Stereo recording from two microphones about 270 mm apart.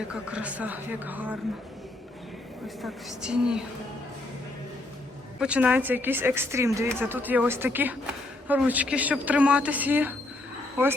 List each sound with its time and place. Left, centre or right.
0.1 s a woman's voice: centre
2.6 s a woman's voice: centre
5.4 s a woman's voice: centre